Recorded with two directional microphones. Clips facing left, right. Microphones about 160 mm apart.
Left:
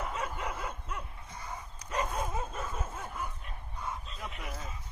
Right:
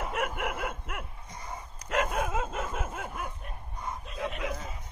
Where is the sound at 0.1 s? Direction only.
80° right.